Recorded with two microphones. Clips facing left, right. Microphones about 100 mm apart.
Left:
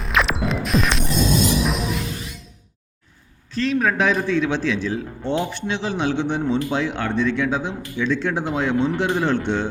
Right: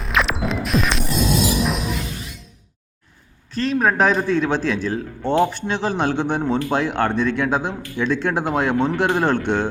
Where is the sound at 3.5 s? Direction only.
40° right (ahead or behind).